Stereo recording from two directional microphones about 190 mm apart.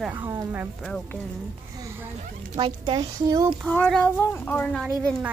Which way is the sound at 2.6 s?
25° right (ahead or behind).